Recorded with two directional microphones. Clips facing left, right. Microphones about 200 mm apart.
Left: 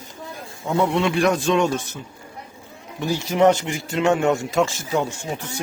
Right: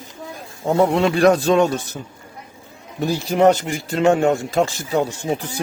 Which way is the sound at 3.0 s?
35° right (ahead or behind).